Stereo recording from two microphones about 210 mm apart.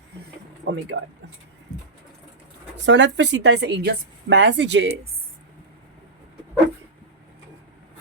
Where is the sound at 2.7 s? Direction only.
55° right (ahead or behind).